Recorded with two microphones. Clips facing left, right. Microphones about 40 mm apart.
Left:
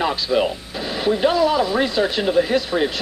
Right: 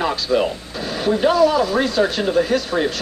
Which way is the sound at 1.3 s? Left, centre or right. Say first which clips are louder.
Right 2 dB; left.